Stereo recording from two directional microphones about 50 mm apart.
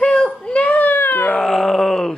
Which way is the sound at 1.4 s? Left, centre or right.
Centre.